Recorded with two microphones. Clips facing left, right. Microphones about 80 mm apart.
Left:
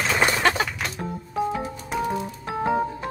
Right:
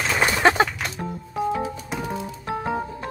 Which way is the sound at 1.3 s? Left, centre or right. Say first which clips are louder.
Right 2 dB; centre.